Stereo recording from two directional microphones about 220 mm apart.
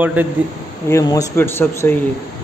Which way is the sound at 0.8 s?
15° left (ahead or behind).